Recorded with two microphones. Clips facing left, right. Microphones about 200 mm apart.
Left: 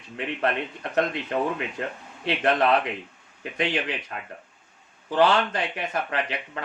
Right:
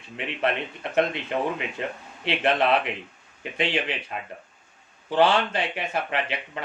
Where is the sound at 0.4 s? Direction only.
25° right (ahead or behind).